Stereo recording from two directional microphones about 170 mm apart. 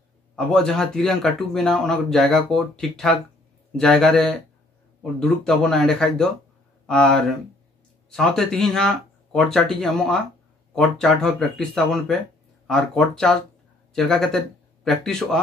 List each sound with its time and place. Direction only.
0.5 s speech: 5° left (ahead or behind)